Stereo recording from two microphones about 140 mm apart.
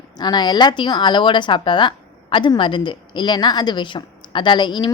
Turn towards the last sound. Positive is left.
turn(degrees=35)  # may be behind; listen again after turning